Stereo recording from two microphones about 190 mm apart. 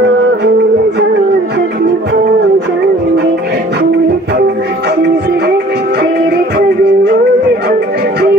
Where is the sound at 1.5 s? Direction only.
60° right (ahead or behind).